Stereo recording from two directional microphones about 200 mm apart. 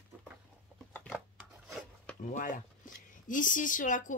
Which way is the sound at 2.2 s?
40° left (ahead or behind).